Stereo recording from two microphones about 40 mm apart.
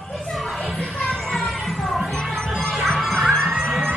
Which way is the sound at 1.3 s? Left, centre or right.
Centre.